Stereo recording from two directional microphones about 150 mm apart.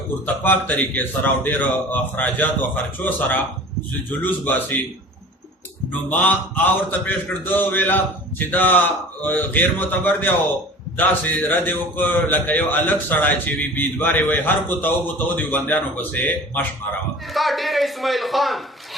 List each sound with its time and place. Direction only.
0.4 s a man's voice: 10° left (ahead or behind)
5.9 s a man's voice: 10° left (ahead or behind)
17.3 s a man's voice: centre (ahead or behind)